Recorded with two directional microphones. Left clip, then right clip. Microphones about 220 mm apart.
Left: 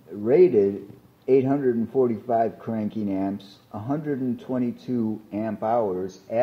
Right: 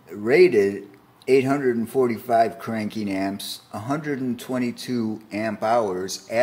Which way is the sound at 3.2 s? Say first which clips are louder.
Right 2 dB; 15° right (ahead or behind).